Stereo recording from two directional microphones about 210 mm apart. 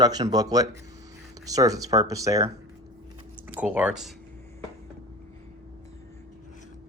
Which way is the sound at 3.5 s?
5° right (ahead or behind).